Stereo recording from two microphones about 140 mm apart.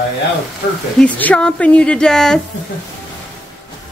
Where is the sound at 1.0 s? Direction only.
10° left (ahead or behind).